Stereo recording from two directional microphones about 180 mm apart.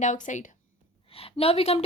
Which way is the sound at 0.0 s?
45° left (ahead or behind).